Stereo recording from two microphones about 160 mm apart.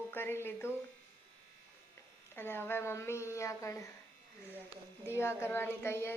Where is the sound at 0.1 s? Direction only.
15° left (ahead or behind).